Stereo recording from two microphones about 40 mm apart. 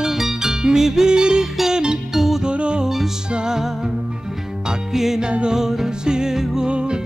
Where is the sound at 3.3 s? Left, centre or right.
Right.